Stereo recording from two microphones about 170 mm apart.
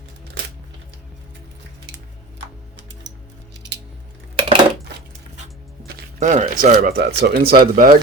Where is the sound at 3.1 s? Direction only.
90° right.